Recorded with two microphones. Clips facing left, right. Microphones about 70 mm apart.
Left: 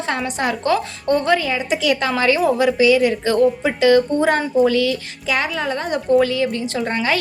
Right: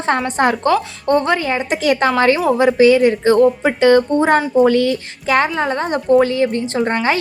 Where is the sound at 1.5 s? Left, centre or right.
Right.